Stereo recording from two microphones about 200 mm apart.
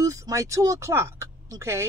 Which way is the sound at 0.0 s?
15° right (ahead or behind).